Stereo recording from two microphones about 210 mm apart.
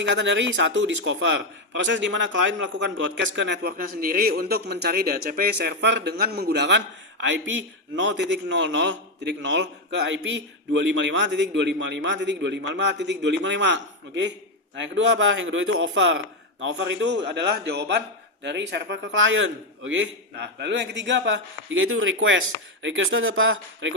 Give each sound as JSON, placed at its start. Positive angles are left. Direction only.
{"t": 0.0, "sound": "a man's voice", "side_deg": -60}